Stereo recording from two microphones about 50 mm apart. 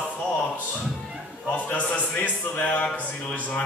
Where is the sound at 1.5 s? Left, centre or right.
Left.